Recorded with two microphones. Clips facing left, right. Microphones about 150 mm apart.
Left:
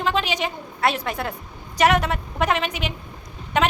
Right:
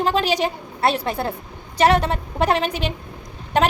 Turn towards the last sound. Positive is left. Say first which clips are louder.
# right 2 dB
turn(degrees=-35)  # may be behind; listen again after turning